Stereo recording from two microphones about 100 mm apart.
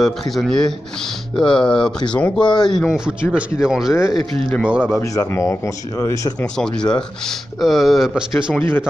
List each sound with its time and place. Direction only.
0.0 s speech: 5° left (ahead or behind)
2.9 s speech: 5° right (ahead or behind)
3.9 s speech: 30° left (ahead or behind)
4.6 s speech: 10° right (ahead or behind)
5.3 s speech: 25° left (ahead or behind)
6.6 s speech: 5° left (ahead or behind)
8.5 s speech: 20° left (ahead or behind)